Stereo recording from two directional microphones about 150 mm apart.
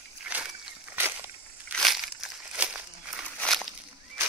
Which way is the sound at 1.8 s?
Centre (ahead or behind).